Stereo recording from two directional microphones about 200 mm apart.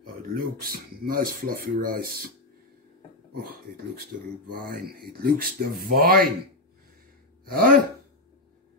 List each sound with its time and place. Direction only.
0.3 s speech: 50° right (ahead or behind)
3.3 s speech: 50° right (ahead or behind)
7.4 s speech: 45° right (ahead or behind)